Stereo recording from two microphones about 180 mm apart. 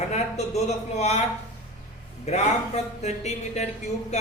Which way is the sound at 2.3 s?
40° left (ahead or behind).